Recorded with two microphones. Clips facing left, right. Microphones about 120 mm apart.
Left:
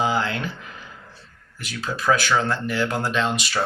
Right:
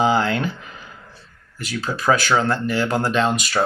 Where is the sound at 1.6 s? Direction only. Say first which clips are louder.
Right 2 dB; 45° right (ahead or behind).